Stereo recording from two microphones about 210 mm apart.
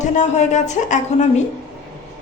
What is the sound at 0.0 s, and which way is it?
A woman's voice, 35° left (ahead or behind).